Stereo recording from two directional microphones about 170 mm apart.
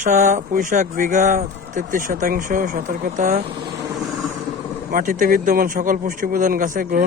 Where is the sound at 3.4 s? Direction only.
35° right (ahead or behind).